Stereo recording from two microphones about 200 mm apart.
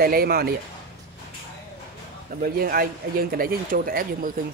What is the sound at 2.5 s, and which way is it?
Speech, 45° right (ahead or behind).